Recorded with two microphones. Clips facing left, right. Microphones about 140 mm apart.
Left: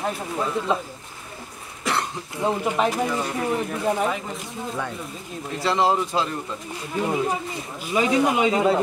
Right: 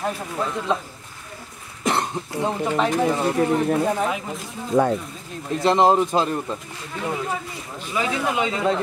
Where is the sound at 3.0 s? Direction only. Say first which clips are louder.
Right 5 dB; 30° right (ahead or behind).